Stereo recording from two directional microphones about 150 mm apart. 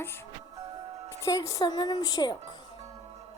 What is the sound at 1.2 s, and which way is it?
Speech, 20° left (ahead or behind).